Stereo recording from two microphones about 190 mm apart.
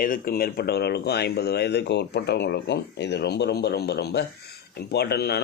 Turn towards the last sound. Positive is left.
turn(degrees=55)  # may be behind; listen again after turning